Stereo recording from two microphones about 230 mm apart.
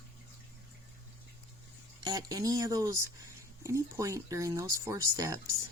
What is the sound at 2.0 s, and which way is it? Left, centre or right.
Speech, centre.